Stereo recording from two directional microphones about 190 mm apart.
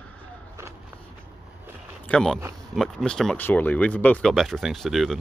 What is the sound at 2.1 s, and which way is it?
Speech, 5° left (ahead or behind).